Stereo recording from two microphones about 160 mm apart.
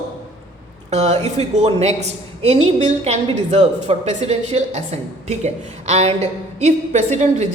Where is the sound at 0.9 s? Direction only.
45° right (ahead or behind).